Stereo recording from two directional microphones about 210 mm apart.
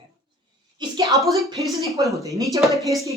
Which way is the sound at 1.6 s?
Centre (ahead or behind).